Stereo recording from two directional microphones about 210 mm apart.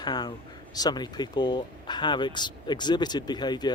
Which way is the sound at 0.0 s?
20° left (ahead or behind).